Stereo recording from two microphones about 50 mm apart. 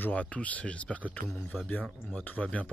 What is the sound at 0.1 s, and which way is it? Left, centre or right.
Speech, left.